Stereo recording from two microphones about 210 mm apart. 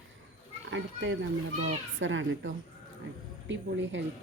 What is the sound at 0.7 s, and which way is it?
Speech, 60° right (ahead or behind).